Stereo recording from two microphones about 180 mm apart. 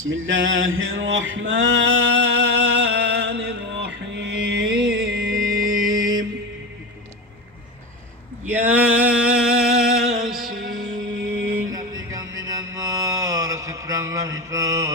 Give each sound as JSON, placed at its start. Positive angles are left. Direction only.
{"t": 0.1, "sound": "male singing", "side_deg": -90}
{"t": 5.8, "sound": "mantra", "side_deg": -50}
{"t": 8.6, "sound": "music", "side_deg": -10}
{"t": 11.2, "sound": "music", "side_deg": -80}
{"t": 12.1, "sound": "mantra", "side_deg": -20}